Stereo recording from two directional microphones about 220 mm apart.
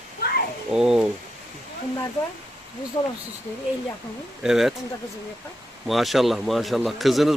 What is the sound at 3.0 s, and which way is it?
Speech, 20° left (ahead or behind).